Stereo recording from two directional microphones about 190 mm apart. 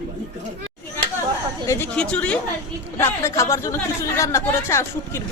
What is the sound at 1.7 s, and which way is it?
Speech, 10° left (ahead or behind).